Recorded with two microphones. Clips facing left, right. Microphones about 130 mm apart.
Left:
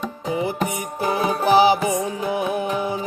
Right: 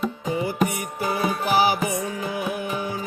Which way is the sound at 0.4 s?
20° left (ahead or behind).